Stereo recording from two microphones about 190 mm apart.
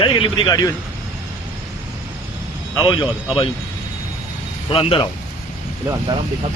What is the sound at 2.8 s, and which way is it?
Speech, 25° left (ahead or behind).